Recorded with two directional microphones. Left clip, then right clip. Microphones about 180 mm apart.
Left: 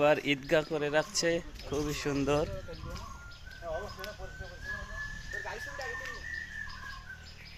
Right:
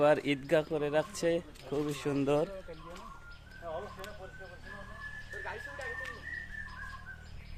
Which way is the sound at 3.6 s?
65° left (ahead or behind).